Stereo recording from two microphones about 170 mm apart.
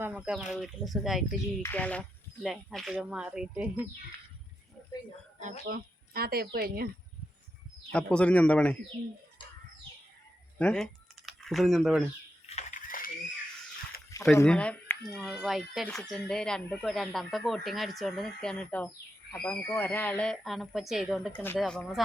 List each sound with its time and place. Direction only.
0.0 s speech: 5° right (ahead or behind)
5.6 s speech: 60° right (ahead or behind)
7.9 s speech: 5° left (ahead or behind)
10.6 s speech: 5° left (ahead or behind)
12.5 s a sound: 45° left (ahead or behind)
14.1 s a sound: 15° left (ahead or behind)
14.4 s speech: 5° left (ahead or behind)